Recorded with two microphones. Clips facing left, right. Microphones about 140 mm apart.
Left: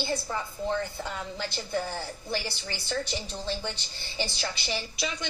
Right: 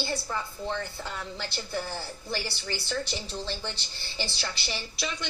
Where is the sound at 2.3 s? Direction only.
15° left (ahead or behind).